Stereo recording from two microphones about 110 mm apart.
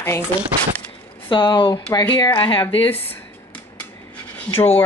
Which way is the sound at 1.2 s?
45° left (ahead or behind).